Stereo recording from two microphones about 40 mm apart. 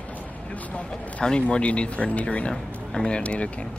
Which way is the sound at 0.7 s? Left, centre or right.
Left.